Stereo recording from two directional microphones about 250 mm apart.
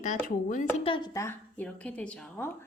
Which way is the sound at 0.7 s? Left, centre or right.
Left.